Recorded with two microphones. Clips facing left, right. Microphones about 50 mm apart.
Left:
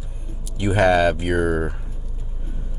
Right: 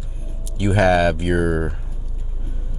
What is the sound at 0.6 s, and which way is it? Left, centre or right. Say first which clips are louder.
Speech: even; centre.